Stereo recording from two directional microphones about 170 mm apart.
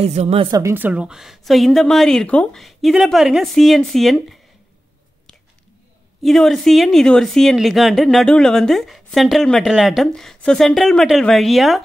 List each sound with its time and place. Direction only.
0.0 s speech: 40° right (ahead or behind)
0.5 s a woman's voice: 15° right (ahead or behind); by 4.4 s centre (ahead or behind)
6.2 s a woman's voice: centre (ahead or behind)